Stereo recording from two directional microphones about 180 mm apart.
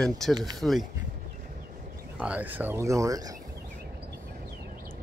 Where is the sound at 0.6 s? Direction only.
Centre (ahead or behind).